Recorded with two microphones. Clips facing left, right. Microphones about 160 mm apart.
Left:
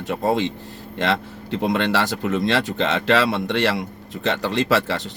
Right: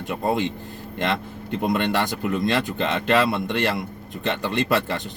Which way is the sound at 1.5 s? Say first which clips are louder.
Left 2 dB; 75° left (ahead or behind).